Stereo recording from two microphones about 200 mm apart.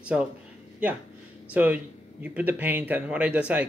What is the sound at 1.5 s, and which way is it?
Speech, 5° right (ahead or behind).